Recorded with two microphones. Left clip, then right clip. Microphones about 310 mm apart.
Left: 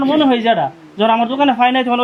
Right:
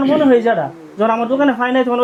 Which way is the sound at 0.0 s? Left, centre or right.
Left.